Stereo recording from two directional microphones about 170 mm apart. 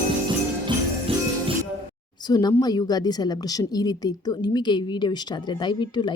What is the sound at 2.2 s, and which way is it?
A woman's voice, 25° left (ahead or behind).